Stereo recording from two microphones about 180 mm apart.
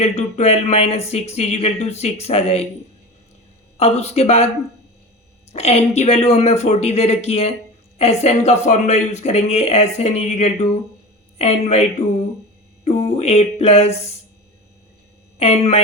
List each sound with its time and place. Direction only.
0.0 s speech: 35° left (ahead or behind)
3.8 s speech: 35° left (ahead or behind)
5.5 s speech: 35° left (ahead or behind)
12.8 s a sound: 35° left (ahead or behind)
15.4 s speech: 35° left (ahead or behind)